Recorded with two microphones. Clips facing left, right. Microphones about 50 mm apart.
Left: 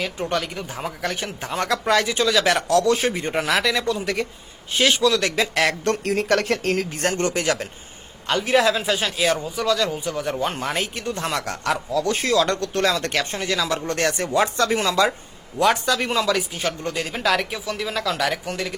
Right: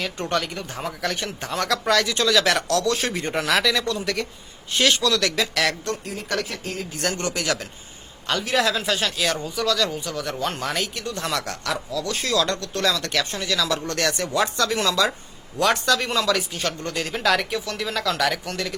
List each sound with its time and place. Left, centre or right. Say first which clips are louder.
0.0 s speech: left 1 dB; centre
5.2 s speech: left 2 dB; left
6.2 s speech: left 5 dB; left
6.9 s speech: left 4 dB; left; by 10.8 s centre
10.9 s speech: left 1 dB; left
15.5 s speech: left 1 dB; centre